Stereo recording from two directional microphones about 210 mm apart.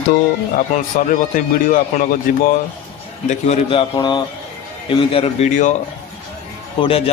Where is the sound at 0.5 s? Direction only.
40° left (ahead or behind).